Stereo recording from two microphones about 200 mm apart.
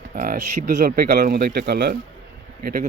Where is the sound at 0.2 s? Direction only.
40° right (ahead or behind).